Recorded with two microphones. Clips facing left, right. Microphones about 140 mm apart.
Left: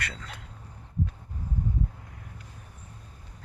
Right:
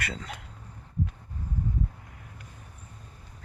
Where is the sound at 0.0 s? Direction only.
25° right (ahead or behind).